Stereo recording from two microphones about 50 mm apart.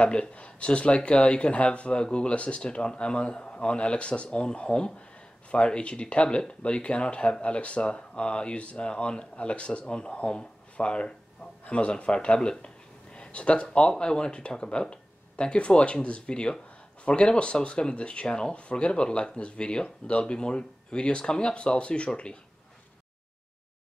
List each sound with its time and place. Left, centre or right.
0.0 s speech: left